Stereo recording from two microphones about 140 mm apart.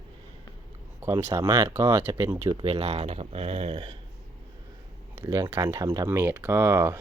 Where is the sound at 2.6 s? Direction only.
45° right (ahead or behind).